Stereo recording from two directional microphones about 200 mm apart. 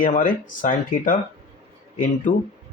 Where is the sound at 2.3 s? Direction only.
40° left (ahead or behind).